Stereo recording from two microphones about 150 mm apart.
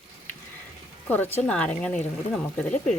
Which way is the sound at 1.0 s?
10° left (ahead or behind).